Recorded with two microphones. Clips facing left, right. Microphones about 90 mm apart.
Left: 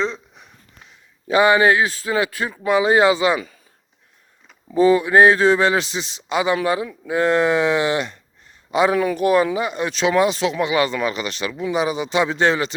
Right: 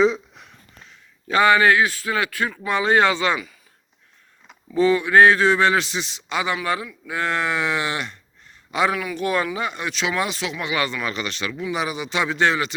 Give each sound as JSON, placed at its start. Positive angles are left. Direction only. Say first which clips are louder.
{"t": 0.0, "sound": "a sound", "louder": "right 6 dB", "side_deg": 0}
{"t": 1.3, "sound": "a man's voice", "louder": "left 2 dB", "side_deg": 15}
{"t": 4.7, "sound": "a man's voice", "louder": "left 3 dB", "side_deg": 25}
{"t": 9.9, "sound": "a man's voice", "louder": "left 10 dB", "side_deg": 30}